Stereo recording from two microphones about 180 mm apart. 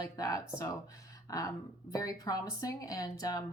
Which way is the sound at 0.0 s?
20° left (ahead or behind).